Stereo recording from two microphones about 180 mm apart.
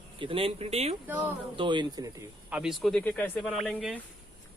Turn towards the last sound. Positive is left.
turn(degrees=-5)  # may be behind; listen again after turning